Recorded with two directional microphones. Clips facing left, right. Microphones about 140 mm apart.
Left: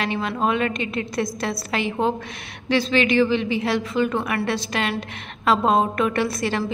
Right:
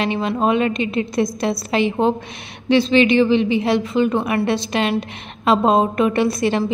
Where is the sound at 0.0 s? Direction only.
20° right (ahead or behind).